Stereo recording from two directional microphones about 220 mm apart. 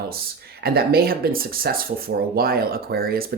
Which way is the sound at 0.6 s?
45° right (ahead or behind).